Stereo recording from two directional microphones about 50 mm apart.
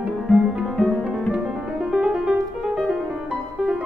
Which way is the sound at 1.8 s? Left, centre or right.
Centre.